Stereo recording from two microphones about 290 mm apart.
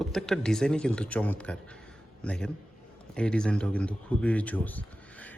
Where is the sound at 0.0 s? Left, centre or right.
Centre.